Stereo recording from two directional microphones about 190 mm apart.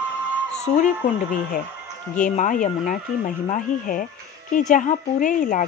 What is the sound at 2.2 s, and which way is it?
Speech, 40° left (ahead or behind).